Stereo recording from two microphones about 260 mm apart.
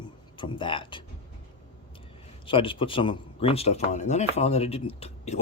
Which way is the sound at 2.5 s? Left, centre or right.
Centre.